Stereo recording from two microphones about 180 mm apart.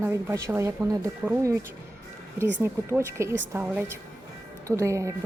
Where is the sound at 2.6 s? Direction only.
10° right (ahead or behind).